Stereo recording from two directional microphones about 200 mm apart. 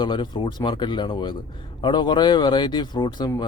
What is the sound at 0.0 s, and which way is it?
Speech, 20° left (ahead or behind).